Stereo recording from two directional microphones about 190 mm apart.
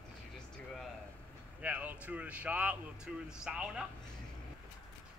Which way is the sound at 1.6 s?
10° right (ahead or behind).